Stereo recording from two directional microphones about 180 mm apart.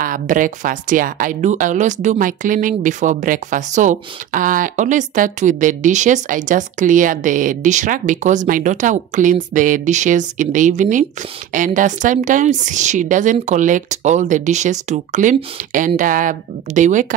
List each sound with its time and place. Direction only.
0.0 s speech: 50° right (ahead or behind)